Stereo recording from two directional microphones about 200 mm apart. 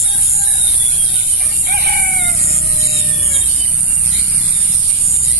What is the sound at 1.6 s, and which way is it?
Chicken, 50° right (ahead or behind).